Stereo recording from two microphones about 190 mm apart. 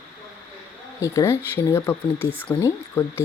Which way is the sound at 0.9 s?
15° left (ahead or behind).